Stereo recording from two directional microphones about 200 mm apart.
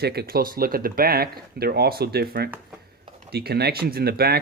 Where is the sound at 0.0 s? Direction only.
50° right (ahead or behind).